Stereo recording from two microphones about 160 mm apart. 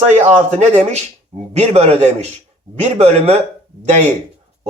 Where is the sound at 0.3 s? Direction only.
45° right (ahead or behind).